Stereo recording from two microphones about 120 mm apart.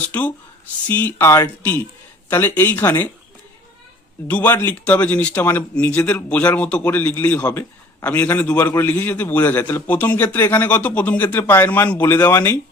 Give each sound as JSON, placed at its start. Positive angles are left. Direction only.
{"t": 0.0, "sound": "speech", "side_deg": 15}
{"t": 4.3, "sound": "speech", "side_deg": 15}